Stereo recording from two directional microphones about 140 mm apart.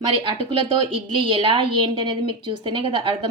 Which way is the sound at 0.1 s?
40° right (ahead or behind).